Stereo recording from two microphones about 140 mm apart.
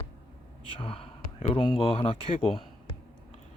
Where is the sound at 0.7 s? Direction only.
40° left (ahead or behind).